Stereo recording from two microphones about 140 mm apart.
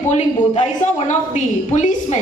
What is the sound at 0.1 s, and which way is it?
A woman's voice, 55° left (ahead or behind).